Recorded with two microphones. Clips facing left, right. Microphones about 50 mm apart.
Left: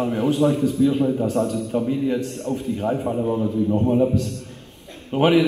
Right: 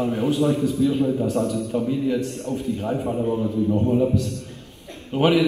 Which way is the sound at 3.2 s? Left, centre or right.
Left.